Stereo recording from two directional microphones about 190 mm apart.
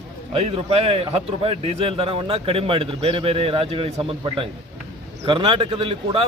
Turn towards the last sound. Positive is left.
turn(degrees=-30)  # may be behind; listen again after turning